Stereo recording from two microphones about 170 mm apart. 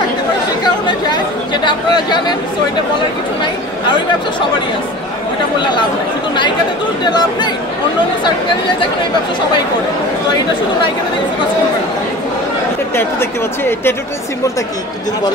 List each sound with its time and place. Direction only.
0.8 s chatter: 25° left (ahead or behind)
7.1 s speech: 25° left (ahead or behind)
12.9 s a woman's voice: 15° left (ahead or behind)